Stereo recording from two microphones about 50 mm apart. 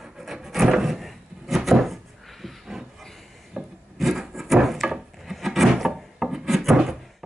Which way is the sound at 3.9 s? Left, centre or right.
Centre.